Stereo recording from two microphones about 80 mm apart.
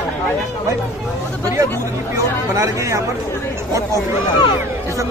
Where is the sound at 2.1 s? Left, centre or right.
Right.